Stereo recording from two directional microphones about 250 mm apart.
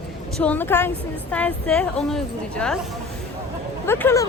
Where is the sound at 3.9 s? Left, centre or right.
Centre.